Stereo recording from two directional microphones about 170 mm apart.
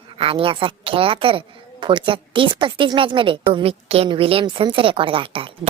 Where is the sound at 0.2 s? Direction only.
30° right (ahead or behind).